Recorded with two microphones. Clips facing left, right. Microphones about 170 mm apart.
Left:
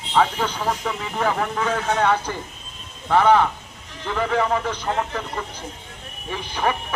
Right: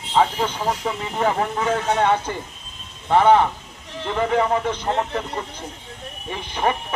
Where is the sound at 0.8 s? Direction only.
25° right (ahead or behind).